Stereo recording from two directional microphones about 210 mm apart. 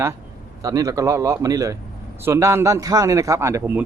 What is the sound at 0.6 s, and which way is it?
A man's voice, 15° right (ahead or behind).